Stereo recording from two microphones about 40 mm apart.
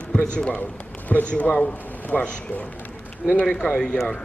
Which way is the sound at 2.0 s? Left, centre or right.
Left.